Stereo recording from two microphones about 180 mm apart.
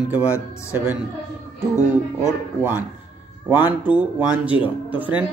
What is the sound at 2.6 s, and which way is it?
Speech, 10° right (ahead or behind).